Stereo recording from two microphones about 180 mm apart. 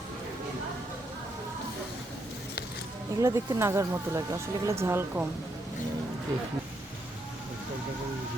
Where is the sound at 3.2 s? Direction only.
15° right (ahead or behind).